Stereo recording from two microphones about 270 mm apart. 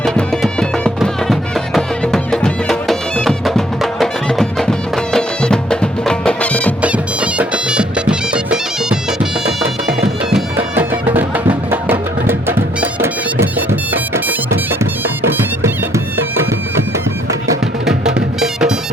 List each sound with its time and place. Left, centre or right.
0.0 s music: centre
18.3 s music: centre